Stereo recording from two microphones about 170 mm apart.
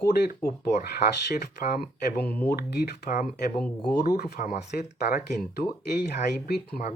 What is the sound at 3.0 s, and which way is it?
Speech, 45° left (ahead or behind).